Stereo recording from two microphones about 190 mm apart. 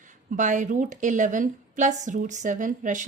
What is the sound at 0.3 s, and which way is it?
A woman's voice, 40° right (ahead or behind).